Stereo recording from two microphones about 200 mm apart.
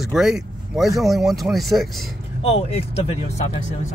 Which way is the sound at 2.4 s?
30° left (ahead or behind).